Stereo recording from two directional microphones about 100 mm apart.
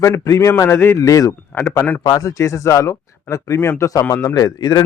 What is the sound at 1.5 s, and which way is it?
Speech, 25° left (ahead or behind).